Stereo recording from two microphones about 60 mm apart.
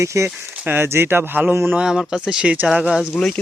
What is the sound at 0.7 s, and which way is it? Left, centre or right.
Speech, right.